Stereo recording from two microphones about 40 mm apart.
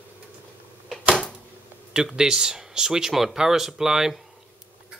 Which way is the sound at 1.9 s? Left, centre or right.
Centre.